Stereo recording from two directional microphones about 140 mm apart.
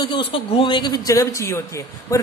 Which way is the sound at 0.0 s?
35° left (ahead or behind).